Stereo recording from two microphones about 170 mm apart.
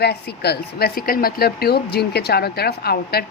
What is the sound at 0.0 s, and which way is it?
Speech, 75° left (ahead or behind).